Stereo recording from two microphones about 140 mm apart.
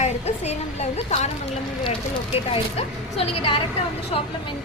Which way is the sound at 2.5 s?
45° left (ahead or behind).